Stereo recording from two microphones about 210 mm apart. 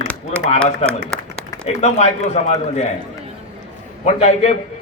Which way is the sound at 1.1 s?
5° left (ahead or behind).